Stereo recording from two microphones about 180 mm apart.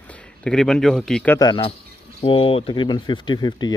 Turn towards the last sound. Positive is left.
turn(degrees=25)  # may be behind; listen again after turning